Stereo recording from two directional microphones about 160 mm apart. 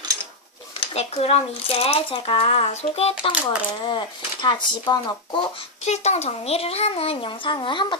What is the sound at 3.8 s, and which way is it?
Speech, 30° left (ahead or behind).